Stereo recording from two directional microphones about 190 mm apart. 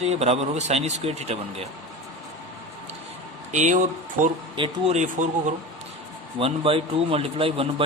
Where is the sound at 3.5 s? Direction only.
40° right (ahead or behind).